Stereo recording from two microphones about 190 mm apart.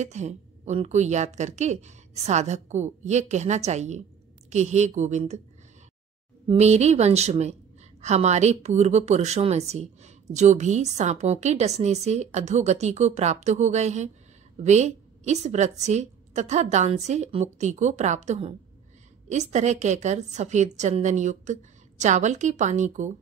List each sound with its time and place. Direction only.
0.0 s a woman's voice: 35° right (ahead or behind)
6.4 s a woman's voice: 35° right (ahead or behind)